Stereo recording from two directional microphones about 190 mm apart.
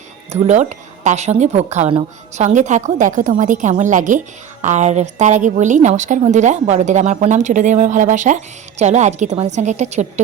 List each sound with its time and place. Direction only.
0.3 s a woman's voice: 35° right (ahead or behind)